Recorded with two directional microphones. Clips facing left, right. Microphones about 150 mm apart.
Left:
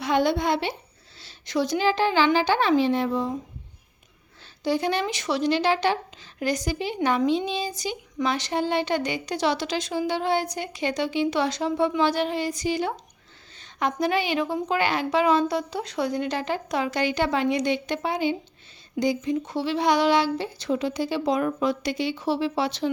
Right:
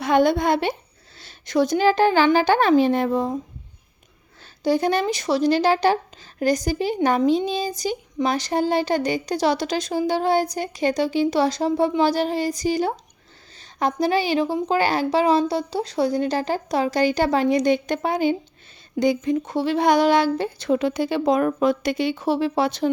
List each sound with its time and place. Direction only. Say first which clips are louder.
0.0 s a child's voice: right 4 dB; 50° right (ahead or behind)
4.6 s speech: right 4 dB; 45° right (ahead or behind)